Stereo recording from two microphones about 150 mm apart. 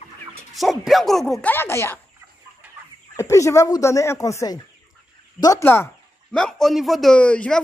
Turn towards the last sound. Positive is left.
turn(degrees=5)  # may be behind; listen again after turning